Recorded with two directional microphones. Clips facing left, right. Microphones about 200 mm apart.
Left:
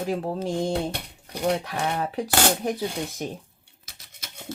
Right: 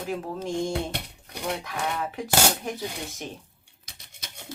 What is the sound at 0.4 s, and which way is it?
Speech, 35° left (ahead or behind).